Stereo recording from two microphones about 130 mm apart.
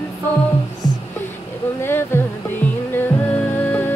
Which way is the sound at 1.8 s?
20° left (ahead or behind).